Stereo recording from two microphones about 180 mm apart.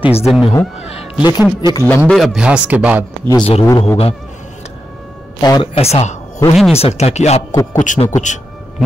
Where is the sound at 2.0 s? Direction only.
Centre (ahead or behind).